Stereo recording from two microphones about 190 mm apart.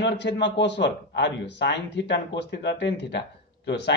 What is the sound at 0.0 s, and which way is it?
Speech, 65° left (ahead or behind).